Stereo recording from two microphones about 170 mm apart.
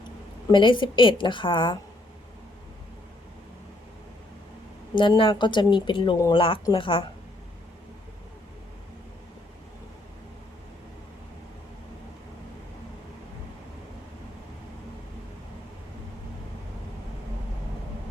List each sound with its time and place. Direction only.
0.5 s a woman's voice: 30° left (ahead or behind)
4.9 s a woman's voice: 30° left (ahead or behind)